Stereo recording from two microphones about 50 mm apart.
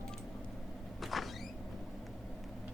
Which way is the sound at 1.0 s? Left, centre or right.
Centre.